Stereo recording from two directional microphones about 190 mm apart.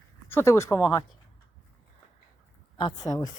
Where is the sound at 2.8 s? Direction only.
25° left (ahead or behind).